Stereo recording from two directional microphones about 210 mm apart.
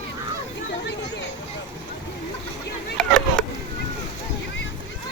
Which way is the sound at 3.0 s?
Centre (ahead or behind).